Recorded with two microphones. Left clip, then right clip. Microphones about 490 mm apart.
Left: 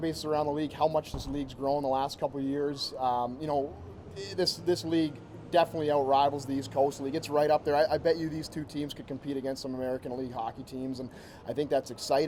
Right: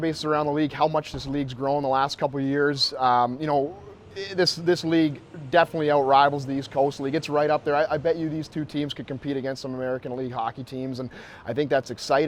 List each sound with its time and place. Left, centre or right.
0.0 s a man's voice: right